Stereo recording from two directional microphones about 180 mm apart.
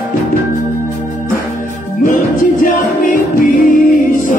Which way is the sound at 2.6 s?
50° left (ahead or behind).